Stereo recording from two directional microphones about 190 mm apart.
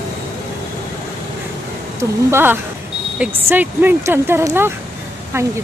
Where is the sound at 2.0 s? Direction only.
15° right (ahead or behind).